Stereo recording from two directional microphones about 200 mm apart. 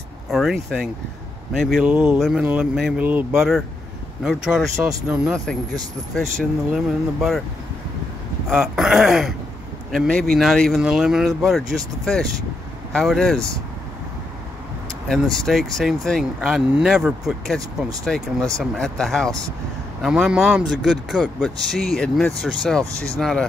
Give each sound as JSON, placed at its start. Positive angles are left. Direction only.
{"t": 0.3, "sound": "speech", "side_deg": 0}
{"t": 6.7, "sound": "speech", "side_deg": 0}
{"t": 8.5, "sound": "speech", "side_deg": 0}
{"t": 15.0, "sound": "speech", "side_deg": 0}